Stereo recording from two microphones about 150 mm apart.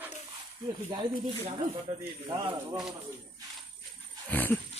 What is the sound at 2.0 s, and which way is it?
Speech, 25° right (ahead or behind).